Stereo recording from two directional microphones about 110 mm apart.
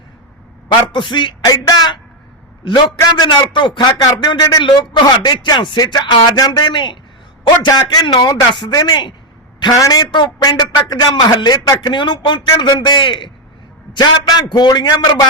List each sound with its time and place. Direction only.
0.9 s a man's voice: 45° left (ahead or behind)
3.2 s a man's voice: 40° left (ahead or behind)